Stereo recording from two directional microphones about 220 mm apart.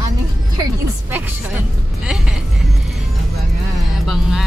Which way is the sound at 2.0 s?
5° right (ahead or behind).